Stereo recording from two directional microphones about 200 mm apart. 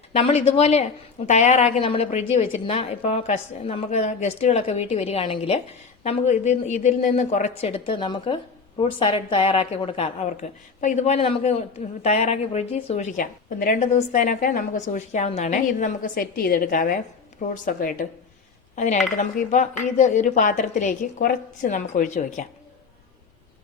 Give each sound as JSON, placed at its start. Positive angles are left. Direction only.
{"t": 0.1, "sound": "a woman's voice", "side_deg": 30}